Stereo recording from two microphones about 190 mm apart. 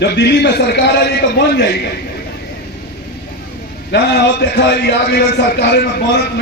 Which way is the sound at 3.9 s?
60° left (ahead or behind).